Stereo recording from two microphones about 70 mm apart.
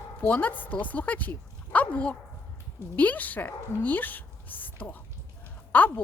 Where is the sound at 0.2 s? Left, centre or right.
Left.